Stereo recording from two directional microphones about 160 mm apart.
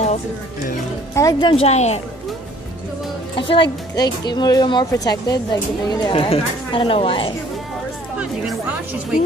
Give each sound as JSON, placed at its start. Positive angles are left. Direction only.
{"t": 1.1, "sound": "speech", "side_deg": 20}
{"t": 1.5, "sound": "speech", "side_deg": 40}
{"t": 3.3, "sound": "speech", "side_deg": 30}
{"t": 8.2, "sound": "speech", "side_deg": -10}